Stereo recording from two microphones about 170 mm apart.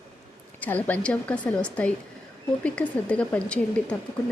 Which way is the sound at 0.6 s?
10° left (ahead or behind).